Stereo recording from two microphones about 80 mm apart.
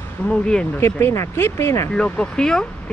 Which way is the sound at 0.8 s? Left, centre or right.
Left.